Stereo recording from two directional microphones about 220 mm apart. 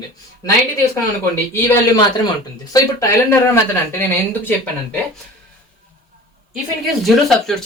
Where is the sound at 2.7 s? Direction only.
15° left (ahead or behind).